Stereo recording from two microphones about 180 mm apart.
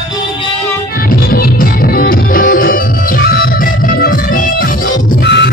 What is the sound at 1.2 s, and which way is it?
Music, 55° left (ahead or behind).